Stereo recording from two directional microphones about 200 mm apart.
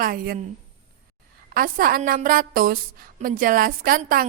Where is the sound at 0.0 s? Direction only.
45° right (ahead or behind).